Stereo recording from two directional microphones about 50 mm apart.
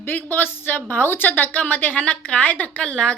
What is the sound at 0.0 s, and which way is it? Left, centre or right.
A woman's voice, left.